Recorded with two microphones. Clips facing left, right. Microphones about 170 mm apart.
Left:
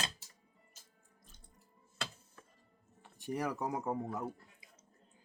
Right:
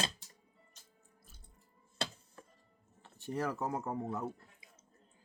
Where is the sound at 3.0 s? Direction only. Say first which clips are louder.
Even; 15° left (ahead or behind).